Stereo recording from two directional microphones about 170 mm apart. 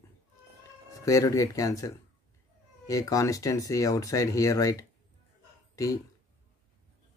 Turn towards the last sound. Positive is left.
turn(degrees=20)  # may be behind; listen again after turning